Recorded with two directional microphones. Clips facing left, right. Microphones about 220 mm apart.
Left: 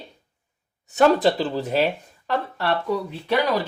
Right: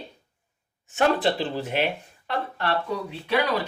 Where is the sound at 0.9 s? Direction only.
40° left (ahead or behind).